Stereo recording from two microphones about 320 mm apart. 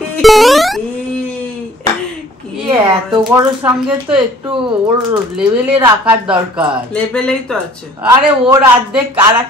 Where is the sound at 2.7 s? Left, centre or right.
Centre.